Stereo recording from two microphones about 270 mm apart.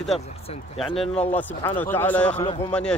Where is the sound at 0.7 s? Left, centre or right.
Centre.